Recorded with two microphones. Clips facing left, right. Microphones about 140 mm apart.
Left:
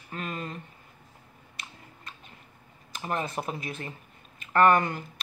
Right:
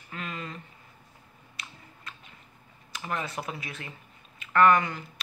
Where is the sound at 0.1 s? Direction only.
45° left (ahead or behind).